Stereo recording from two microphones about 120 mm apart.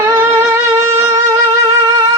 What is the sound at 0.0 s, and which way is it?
Music, 20° right (ahead or behind).